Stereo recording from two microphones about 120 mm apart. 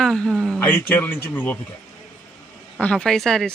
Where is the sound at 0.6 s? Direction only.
20° left (ahead or behind).